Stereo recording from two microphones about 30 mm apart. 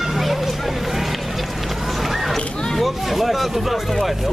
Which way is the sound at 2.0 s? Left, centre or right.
Centre.